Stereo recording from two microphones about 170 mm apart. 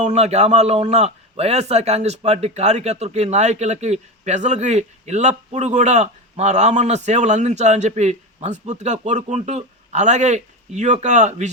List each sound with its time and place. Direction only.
0.0 s a man's voice: 40° right (ahead or behind)